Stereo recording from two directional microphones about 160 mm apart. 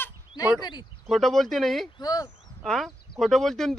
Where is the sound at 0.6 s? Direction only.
25° left (ahead or behind).